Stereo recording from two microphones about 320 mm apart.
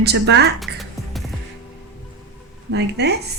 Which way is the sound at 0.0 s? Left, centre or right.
Right.